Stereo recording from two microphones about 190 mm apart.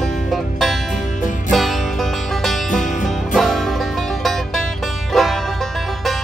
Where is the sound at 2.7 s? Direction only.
40° left (ahead or behind).